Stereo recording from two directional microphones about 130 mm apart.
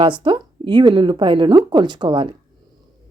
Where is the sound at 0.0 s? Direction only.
40° right (ahead or behind).